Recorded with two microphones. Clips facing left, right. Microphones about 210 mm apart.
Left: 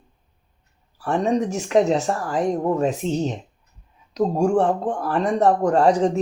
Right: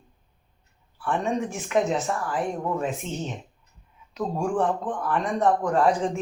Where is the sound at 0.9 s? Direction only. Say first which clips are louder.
Left 5 dB; 40° left (ahead or behind).